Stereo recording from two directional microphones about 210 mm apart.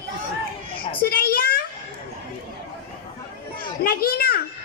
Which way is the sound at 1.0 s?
45° left (ahead or behind).